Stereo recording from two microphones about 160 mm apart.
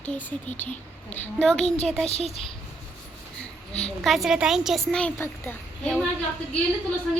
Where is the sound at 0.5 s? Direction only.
45° left (ahead or behind).